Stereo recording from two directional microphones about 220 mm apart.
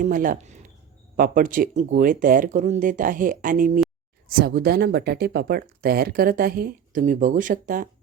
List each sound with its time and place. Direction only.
0.0 s speech: 40° right (ahead or behind)